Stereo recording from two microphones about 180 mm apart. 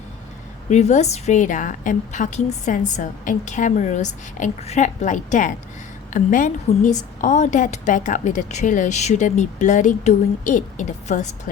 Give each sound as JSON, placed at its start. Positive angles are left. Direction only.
{"t": 0.7, "sound": "a woman's voice", "side_deg": 40}